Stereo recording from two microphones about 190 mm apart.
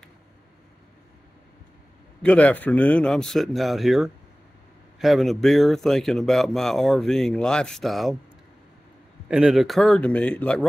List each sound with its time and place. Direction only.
2.2 s a man's voice: 5° left (ahead or behind)
9.3 s a man's voice: 5° right (ahead or behind)